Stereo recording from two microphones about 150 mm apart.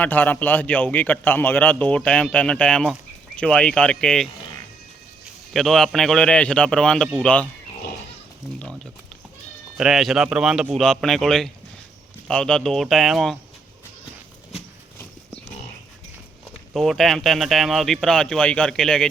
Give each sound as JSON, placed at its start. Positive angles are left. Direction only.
{"t": 0.0, "sound": "a man's voice", "side_deg": 10}
{"t": 5.5, "sound": "a man's voice", "side_deg": 0}
{"t": 8.5, "sound": "a sound", "side_deg": 5}
{"t": 9.7, "sound": "speech", "side_deg": -5}
{"t": 16.7, "sound": "speech", "side_deg": 0}